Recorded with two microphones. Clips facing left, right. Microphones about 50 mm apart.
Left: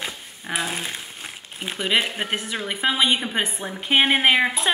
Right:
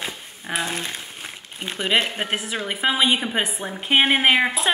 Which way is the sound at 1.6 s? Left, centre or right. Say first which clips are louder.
Right 1 dB; centre.